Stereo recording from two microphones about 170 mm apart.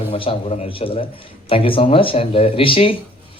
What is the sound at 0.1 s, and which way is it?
Speech, 35° left (ahead or behind).